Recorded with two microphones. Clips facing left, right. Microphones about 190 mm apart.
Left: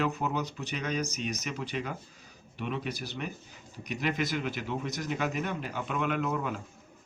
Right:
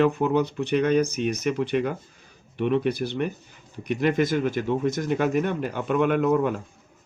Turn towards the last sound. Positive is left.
turn(degrees=-50)  # may be behind; listen again after turning